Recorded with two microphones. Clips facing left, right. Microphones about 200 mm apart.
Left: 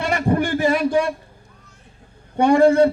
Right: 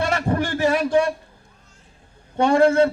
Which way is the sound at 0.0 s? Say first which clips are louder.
Left 2 dB; 15° left (ahead or behind).